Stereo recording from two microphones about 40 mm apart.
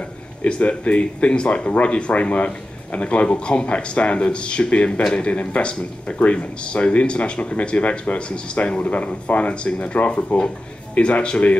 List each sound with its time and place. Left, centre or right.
0.6 s speech: left
6.1 s speech: left